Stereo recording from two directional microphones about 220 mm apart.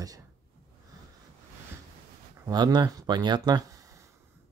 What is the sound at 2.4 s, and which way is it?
Speech, 20° right (ahead or behind).